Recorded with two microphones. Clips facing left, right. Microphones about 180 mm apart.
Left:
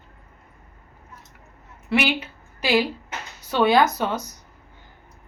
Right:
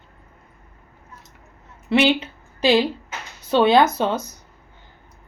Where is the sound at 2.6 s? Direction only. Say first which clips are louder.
Right 4 dB; 25° right (ahead or behind).